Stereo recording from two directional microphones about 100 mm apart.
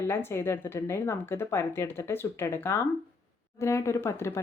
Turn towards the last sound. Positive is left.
turn(degrees=25)  # may be behind; listen again after turning